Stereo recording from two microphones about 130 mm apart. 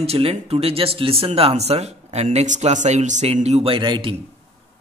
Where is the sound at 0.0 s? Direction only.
50° right (ahead or behind).